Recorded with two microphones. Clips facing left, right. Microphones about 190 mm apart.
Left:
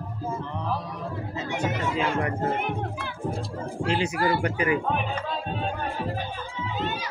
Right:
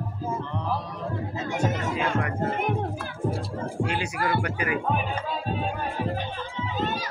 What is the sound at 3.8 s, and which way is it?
Speech, 25° left (ahead or behind).